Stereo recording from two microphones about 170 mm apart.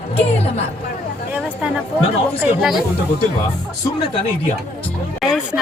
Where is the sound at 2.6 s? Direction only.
Centre (ahead or behind).